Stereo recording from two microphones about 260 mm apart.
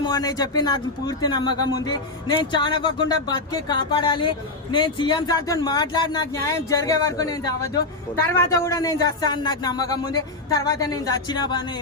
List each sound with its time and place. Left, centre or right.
0.0 s speech: centre